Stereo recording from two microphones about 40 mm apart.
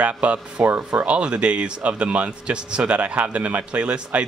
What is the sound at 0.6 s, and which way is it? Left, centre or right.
Speech, right.